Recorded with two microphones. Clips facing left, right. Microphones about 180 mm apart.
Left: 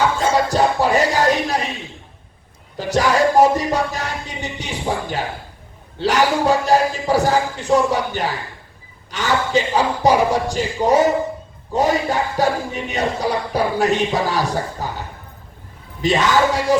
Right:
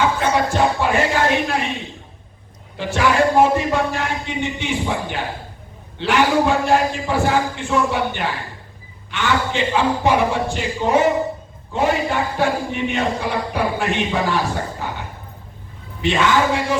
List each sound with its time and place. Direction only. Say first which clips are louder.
0.5 s music: left 2 dB; 40° left (ahead or behind)
2.7 s a sound: left 1 dB; 40° left (ahead or behind)
6.0 s chant: even; 40° left (ahead or behind)
16.0 s chant: left 1 dB; 40° left (ahead or behind)